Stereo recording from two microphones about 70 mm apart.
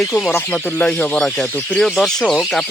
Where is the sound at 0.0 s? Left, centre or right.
Centre.